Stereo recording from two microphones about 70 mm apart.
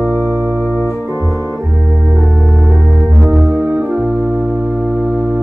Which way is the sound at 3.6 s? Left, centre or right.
Right.